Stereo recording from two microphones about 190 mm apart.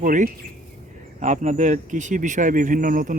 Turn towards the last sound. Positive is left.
turn(degrees=-45)  # may be behind; listen again after turning